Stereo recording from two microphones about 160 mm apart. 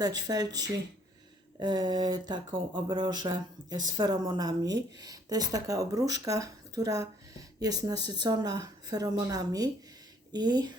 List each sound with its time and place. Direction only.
0.0 s speech: 25° right (ahead or behind)